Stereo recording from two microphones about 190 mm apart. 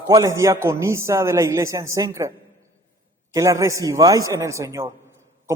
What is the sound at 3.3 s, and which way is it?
A man's voice, 20° right (ahead or behind).